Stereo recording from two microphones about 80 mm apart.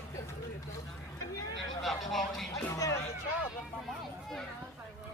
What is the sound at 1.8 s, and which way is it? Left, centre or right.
Speech, centre.